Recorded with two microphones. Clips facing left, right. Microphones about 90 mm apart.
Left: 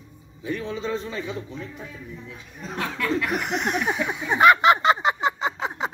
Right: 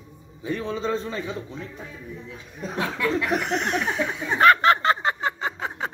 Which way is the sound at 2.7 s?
20° right (ahead or behind).